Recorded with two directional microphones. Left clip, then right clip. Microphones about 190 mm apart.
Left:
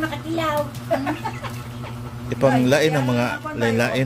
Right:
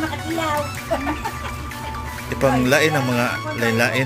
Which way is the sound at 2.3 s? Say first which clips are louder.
Even; centre (ahead or behind).